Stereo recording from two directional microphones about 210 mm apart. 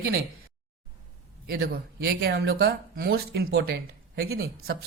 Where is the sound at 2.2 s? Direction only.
55° right (ahead or behind).